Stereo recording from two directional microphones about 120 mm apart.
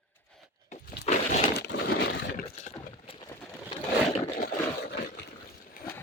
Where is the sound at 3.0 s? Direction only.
50° left (ahead or behind).